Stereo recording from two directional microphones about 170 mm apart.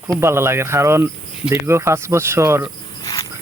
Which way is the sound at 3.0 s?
20° left (ahead or behind).